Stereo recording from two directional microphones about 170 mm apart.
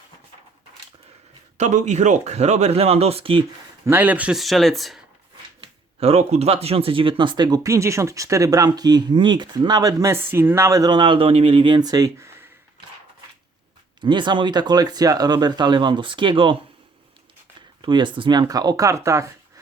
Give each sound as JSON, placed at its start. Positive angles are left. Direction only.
{"t": 1.5, "sound": "speech", "side_deg": -45}
{"t": 3.8, "sound": "speech", "side_deg": -10}
{"t": 5.5, "sound": "speech", "side_deg": -40}
{"t": 14.0, "sound": "speech", "side_deg": -25}
{"t": 17.8, "sound": "speech", "side_deg": -30}